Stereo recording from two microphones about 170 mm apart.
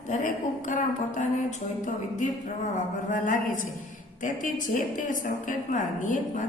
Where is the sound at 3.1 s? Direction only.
50° left (ahead or behind).